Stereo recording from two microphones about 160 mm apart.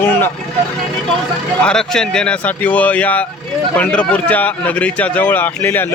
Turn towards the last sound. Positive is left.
turn(degrees=10)  # may be behind; listen again after turning